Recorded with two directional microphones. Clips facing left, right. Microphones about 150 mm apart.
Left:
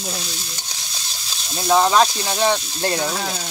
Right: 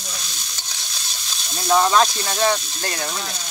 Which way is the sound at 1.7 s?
15° left (ahead or behind).